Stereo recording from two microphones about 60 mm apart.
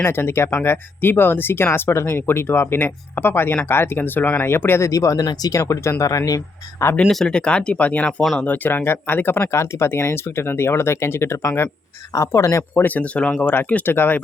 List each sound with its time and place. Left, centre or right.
0.0 s speech: left
4.8 s speech: left
7.1 s speech: centre; by 12.6 s left
12.7 s speech: left